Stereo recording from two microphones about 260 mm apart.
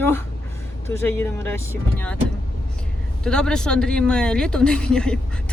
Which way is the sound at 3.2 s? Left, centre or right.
Centre.